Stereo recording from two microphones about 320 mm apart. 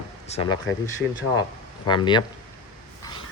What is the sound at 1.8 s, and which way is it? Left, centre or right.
Speech, centre.